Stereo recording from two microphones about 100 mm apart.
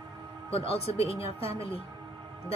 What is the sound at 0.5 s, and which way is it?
A woman's voice, 90° left.